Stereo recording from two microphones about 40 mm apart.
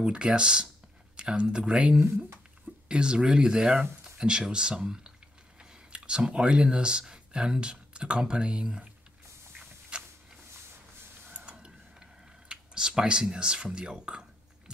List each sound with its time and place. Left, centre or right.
0.0 s speech: right
9.9 s a sound: right
11.2 s creak: right
12.4 s speech: centre